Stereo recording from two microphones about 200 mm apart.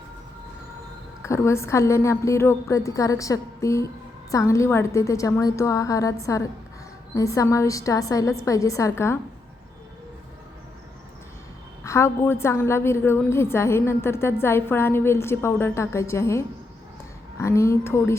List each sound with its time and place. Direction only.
1.2 s a woman's voice: 15° left (ahead or behind)
11.8 s a woman's voice: 15° left (ahead or behind)